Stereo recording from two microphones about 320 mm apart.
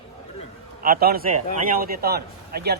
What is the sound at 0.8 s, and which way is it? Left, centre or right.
Speech, right.